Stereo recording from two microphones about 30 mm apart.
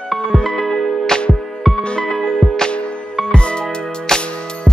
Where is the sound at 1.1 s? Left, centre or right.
Left.